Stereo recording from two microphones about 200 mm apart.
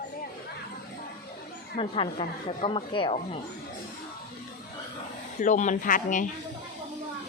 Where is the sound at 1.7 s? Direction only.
25° left (ahead or behind).